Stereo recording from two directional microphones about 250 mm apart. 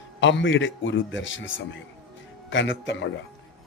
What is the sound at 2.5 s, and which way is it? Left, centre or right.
Speech, left.